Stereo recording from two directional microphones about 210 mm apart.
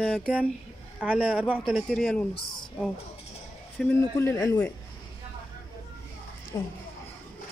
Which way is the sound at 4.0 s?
15° left (ahead or behind).